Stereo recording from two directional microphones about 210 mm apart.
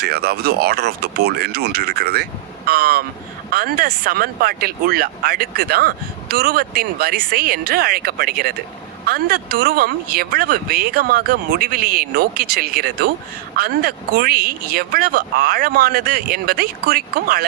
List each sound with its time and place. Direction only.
0.0 s speech: 50° right (ahead or behind)